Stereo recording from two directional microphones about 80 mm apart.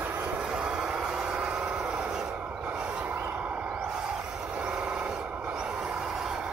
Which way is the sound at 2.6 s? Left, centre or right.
Centre.